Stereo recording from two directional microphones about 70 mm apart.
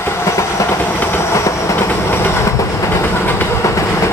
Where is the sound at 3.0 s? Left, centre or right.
Left.